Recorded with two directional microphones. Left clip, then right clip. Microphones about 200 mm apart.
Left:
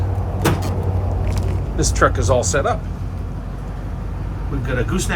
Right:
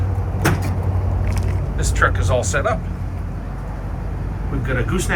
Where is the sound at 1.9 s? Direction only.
30° left (ahead or behind).